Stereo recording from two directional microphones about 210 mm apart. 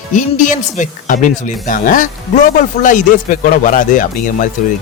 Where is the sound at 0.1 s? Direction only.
35° left (ahead or behind).